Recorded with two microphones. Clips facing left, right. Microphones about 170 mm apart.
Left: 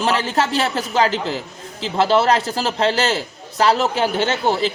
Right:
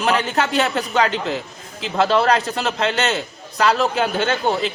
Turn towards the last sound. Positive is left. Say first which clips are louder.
# left 1 dB
turn(degrees=30)  # may be behind; listen again after turning